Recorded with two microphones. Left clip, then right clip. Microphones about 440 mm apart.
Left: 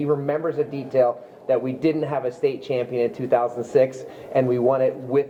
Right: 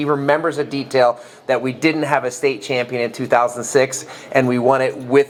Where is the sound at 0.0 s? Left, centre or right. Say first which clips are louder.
Right 6 dB; right.